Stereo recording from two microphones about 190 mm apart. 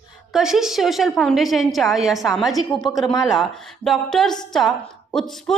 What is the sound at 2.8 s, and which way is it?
Speech, 20° left (ahead or behind).